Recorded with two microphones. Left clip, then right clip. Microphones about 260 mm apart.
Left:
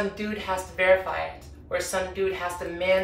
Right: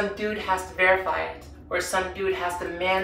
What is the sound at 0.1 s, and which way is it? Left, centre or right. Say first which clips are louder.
Speech: right 4 dB; centre.